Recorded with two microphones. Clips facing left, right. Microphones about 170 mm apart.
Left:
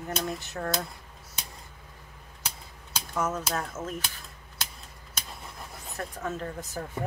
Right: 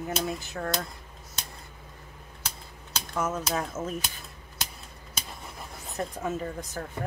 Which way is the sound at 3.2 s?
10° right (ahead or behind).